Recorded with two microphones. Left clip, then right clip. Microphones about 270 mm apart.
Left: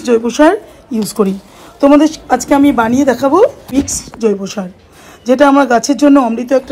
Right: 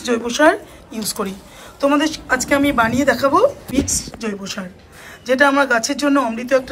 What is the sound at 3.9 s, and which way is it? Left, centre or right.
Speech, left.